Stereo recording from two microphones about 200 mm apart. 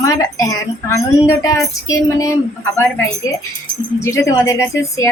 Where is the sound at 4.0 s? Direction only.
15° left (ahead or behind).